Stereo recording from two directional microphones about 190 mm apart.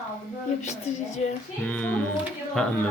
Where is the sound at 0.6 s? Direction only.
40° left (ahead or behind).